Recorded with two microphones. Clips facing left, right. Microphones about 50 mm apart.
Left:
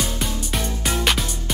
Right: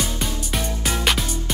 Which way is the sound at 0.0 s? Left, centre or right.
Centre.